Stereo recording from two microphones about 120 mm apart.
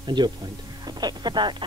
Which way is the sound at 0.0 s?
40° right (ahead or behind).